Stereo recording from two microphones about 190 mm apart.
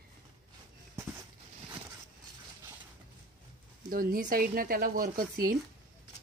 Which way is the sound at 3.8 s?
50° right (ahead or behind).